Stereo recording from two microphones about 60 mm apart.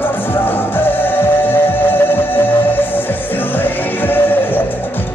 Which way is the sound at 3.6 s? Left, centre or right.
Left.